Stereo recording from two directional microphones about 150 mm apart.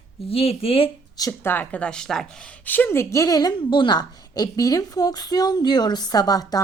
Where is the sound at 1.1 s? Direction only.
25° left (ahead or behind).